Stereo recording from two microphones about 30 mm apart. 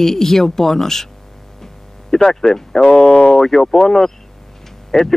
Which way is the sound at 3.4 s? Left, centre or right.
Centre.